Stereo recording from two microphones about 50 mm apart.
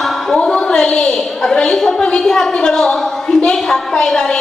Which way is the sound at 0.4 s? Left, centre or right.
Centre.